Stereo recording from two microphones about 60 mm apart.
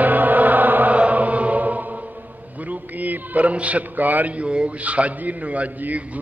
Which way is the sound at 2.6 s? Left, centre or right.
Right.